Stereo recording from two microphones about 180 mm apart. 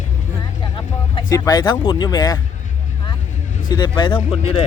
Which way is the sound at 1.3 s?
20° left (ahead or behind).